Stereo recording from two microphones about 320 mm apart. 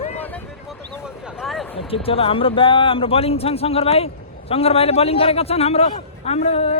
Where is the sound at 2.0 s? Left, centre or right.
Centre.